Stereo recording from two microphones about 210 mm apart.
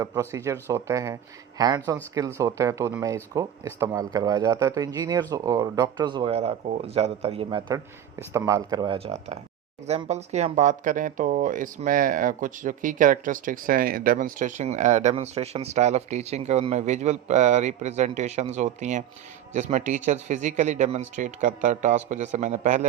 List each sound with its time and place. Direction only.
0.0 s a man's voice: 15° right (ahead or behind); by 22.9 s 35° right (ahead or behind)